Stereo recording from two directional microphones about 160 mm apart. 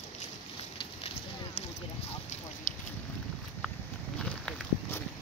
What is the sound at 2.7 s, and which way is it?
Boat, 55° left (ahead or behind).